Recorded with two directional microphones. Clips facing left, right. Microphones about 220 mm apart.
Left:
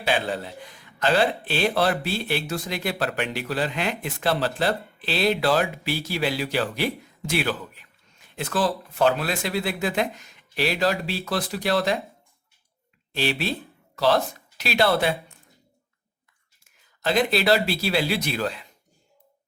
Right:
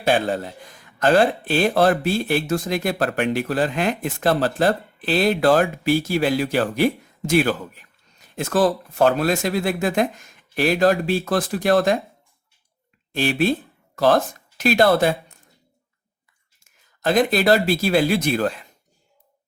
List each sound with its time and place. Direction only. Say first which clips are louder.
0.0 s speech: right 5 dB; 45° right (ahead or behind)
13.1 s speech: right 6 dB; 50° right (ahead or behind)
17.0 s speech: right 4 dB; 50° right (ahead or behind)